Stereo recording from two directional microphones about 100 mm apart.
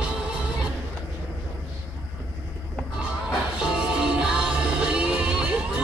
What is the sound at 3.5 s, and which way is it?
Music, 10° right (ahead or behind).